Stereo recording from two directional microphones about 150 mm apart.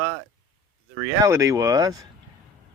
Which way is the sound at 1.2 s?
20° right (ahead or behind).